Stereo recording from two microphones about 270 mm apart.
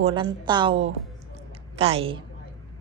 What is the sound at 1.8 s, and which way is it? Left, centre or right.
Speech, right.